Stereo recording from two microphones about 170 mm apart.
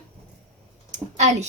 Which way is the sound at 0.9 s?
40° right (ahead or behind).